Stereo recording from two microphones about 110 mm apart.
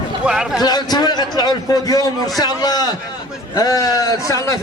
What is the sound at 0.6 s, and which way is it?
A man's voice, 40° left (ahead or behind).